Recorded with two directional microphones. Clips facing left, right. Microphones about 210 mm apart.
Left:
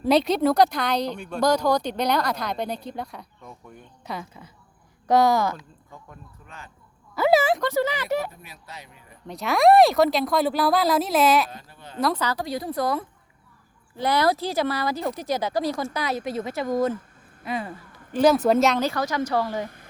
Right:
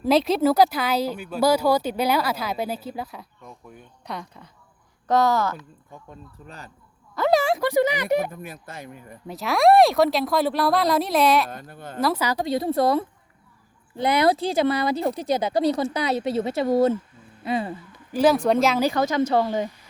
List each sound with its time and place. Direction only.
0.0 s speech: centre (ahead or behind)
6.4 s speech: 35° right (ahead or behind)
7.2 s a sound: 5° left (ahead or behind)
7.6 s speech: 15° right (ahead or behind)
8.3 s speech: 50° right (ahead or behind)
9.2 s speech: centre (ahead or behind)
11.4 s speech: 55° right (ahead or behind)
11.9 s speech: 5° right (ahead or behind)
12.4 s speech: 25° right (ahead or behind)
18.1 s speech: centre (ahead or behind)
18.8 s speech: 20° right (ahead or behind)